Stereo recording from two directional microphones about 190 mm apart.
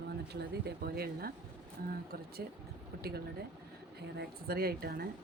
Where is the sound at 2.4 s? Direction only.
55° right (ahead or behind).